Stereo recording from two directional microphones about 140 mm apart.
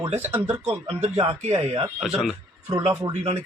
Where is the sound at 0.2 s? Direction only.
15° right (ahead or behind).